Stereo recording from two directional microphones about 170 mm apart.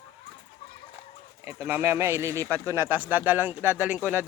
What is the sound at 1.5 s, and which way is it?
Speech, 15° right (ahead or behind).